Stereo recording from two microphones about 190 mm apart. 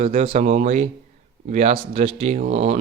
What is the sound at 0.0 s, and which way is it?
Speech, 35° right (ahead or behind).